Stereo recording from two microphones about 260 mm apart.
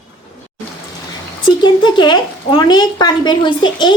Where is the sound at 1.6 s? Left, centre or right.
Centre.